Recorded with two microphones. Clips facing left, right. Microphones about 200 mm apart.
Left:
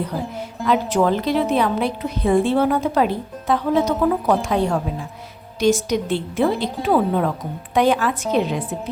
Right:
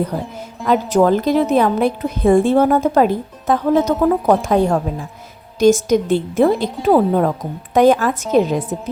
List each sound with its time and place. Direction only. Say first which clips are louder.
0.7 s a woman's voice: right 4 dB; 40° right (ahead or behind)